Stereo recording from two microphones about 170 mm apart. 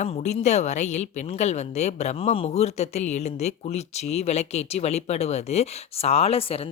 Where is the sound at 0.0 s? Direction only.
40° left (ahead or behind).